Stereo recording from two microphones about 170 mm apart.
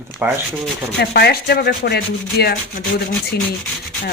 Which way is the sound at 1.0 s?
70° left (ahead or behind).